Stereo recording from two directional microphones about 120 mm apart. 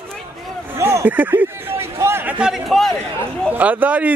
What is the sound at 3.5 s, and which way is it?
Speech, 15° right (ahead or behind).